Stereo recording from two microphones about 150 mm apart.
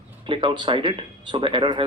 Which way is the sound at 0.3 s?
35° right (ahead or behind).